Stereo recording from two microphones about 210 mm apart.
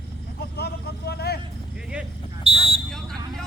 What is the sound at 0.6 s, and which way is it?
Vehicle, 50° left (ahead or behind).